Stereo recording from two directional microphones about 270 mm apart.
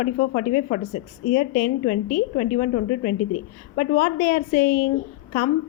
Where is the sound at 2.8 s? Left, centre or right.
Left.